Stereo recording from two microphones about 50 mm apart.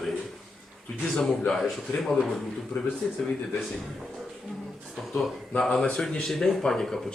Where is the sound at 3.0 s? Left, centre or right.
Centre.